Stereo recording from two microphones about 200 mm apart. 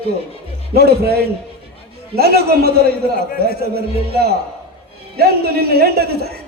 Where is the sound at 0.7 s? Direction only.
50° right (ahead or behind).